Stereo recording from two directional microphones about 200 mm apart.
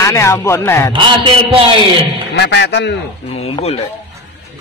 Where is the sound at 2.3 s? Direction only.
60° left (ahead or behind).